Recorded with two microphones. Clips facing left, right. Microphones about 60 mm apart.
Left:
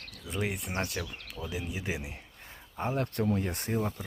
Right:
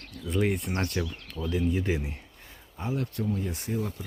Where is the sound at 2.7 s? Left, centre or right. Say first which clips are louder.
Even; left.